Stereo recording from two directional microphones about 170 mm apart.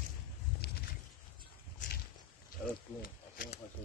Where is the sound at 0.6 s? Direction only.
65° left (ahead or behind).